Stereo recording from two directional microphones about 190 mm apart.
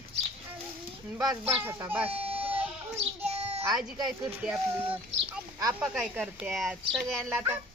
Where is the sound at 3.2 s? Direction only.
35° right (ahead or behind).